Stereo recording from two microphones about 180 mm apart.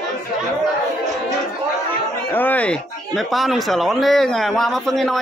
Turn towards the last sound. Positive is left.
turn(degrees=0)  # may be behind; listen again after turning